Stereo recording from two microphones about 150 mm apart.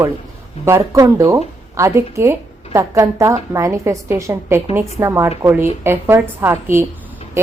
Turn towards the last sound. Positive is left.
turn(degrees=-15)  # may be behind; listen again after turning